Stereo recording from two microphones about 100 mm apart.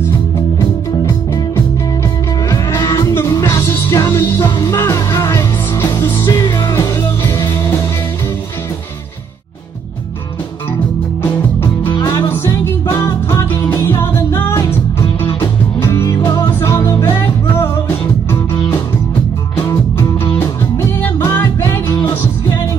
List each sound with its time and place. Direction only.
2.5 s music: 30° left (ahead or behind)
7.0 s music: 25° left (ahead or behind)
12.9 s music: 30° left (ahead or behind)
15.8 s music: 30° left (ahead or behind)
20.3 s music: 20° left (ahead or behind)